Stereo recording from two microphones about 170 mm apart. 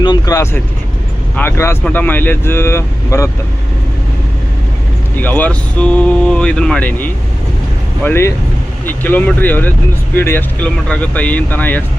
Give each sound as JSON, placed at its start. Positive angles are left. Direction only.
{"t": 0.0, "sound": "speech", "side_deg": 25}
{"t": 5.1, "sound": "speech", "side_deg": 10}